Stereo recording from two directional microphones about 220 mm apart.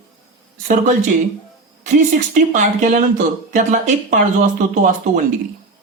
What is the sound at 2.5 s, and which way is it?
A woman's voice, 35° right (ahead or behind).